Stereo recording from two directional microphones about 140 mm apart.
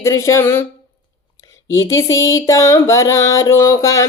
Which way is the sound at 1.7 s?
20° left (ahead or behind).